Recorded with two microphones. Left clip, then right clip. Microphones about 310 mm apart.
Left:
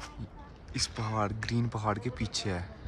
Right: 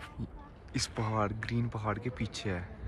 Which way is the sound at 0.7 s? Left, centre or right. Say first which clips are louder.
Left 1 dB; centre.